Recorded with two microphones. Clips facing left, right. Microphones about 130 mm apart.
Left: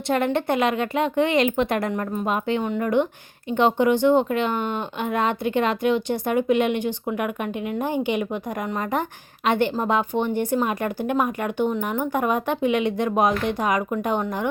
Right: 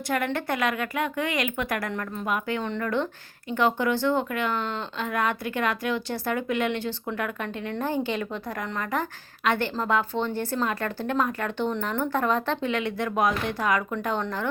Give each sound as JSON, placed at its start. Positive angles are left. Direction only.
{"t": 0.3, "sound": "speech", "side_deg": 20}